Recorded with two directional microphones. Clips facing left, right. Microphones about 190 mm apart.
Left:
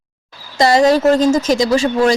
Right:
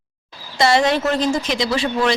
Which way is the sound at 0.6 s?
40° left (ahead or behind).